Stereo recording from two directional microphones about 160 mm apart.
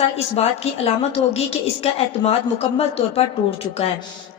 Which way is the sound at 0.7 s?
40° left (ahead or behind).